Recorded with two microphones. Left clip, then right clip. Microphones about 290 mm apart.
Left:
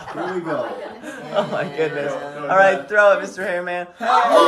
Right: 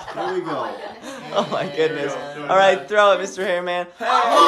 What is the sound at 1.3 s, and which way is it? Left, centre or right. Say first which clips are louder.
Speech: even; centre.